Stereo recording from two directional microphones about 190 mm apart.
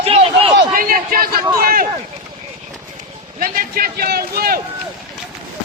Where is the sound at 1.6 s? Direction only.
50° right (ahead or behind).